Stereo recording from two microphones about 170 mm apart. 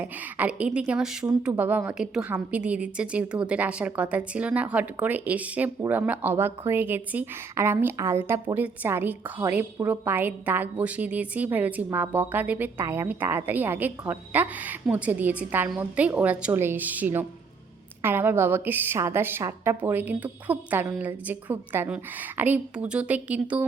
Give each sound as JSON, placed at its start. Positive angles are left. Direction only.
{"t": 0.0, "sound": "a woman's voice", "side_deg": -10}